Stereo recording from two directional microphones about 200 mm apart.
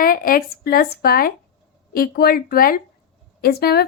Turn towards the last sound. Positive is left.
turn(degrees=50)  # may be behind; listen again after turning